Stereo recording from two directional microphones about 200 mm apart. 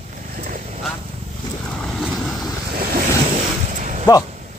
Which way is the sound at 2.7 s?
50° right (ahead or behind).